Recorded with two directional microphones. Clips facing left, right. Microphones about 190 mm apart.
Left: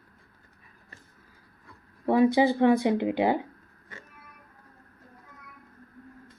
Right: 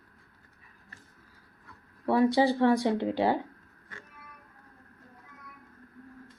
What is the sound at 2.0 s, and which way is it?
Speech, 15° left (ahead or behind).